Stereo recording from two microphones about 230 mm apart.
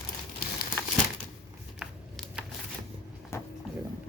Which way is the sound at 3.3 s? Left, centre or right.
Centre.